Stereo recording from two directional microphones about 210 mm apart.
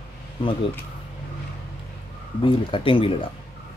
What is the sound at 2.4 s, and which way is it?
Speech, 25° left (ahead or behind).